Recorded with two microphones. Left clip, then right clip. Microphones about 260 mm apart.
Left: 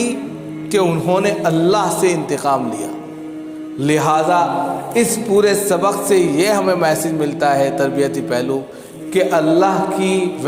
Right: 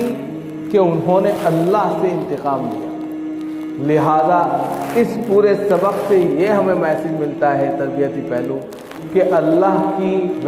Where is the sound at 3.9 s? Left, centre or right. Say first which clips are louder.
Right 1 dB; left.